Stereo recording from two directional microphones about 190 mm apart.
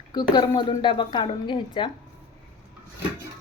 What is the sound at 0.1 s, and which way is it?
A woman's voice, 20° left (ahead or behind).